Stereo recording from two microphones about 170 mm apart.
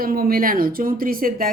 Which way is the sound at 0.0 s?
60° right (ahead or behind).